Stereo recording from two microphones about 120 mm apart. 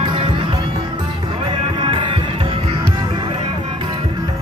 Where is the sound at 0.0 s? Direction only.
45° right (ahead or behind).